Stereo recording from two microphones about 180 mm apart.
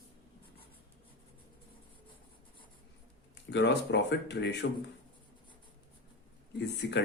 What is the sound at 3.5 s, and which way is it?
Speech, 75° left (ahead or behind).